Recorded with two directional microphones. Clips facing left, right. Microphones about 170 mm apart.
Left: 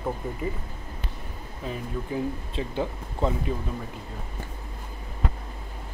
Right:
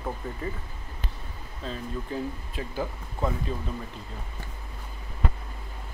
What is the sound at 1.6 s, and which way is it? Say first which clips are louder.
Speech: left 2 dB; 15° left (ahead or behind).